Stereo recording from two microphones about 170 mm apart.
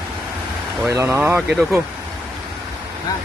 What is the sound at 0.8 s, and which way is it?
Speech, 15° right (ahead or behind).